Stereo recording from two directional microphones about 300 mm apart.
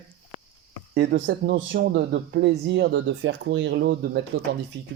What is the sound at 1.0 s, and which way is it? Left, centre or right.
Speech, right.